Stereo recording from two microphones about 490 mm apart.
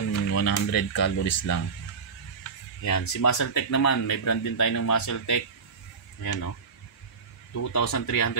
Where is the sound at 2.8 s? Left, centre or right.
Left.